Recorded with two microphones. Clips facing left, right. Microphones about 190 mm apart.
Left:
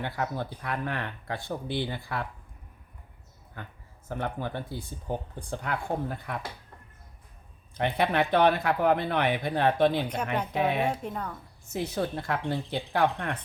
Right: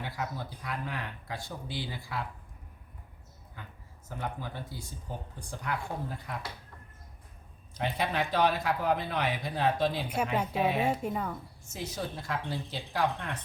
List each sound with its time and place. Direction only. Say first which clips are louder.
0.0 s speech: left 5 dB; 60° left (ahead or behind)
3.6 s speech: left 5 dB; 60° left (ahead or behind)
7.7 s speech: left 5 dB; 60° left (ahead or behind)
10.8 s speech: right 1 dB; 5° right (ahead or behind)
11.6 s speech: left 8 dB; 60° left (ahead or behind)